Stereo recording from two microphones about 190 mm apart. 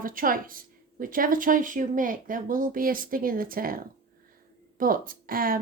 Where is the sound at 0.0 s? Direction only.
45° right (ahead or behind).